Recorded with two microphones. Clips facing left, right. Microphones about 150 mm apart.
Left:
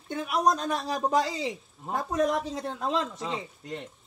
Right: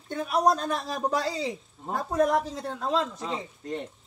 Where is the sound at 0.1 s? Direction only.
20° left (ahead or behind).